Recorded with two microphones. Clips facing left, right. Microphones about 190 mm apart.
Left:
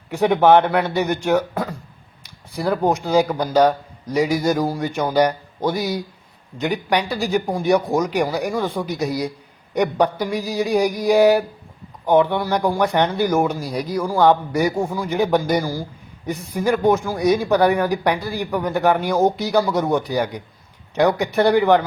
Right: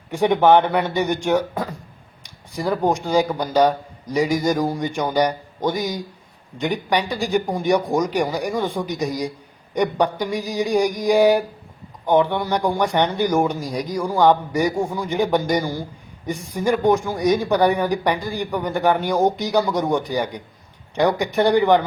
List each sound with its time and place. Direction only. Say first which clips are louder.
0.1 s a man's voice: left 1 dB; 5° left (ahead or behind)
2.8 s a man's voice: left 1 dB; 10° left (ahead or behind)
3.6 s a man's voice: left 1 dB; 10° right (ahead or behind)
4.1 s a man's voice: left 1 dB; 10° left (ahead or behind)